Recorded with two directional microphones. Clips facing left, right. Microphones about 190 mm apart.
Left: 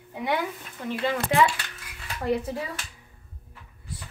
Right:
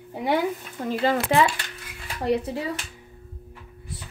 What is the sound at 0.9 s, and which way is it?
Speech, 40° right (ahead or behind).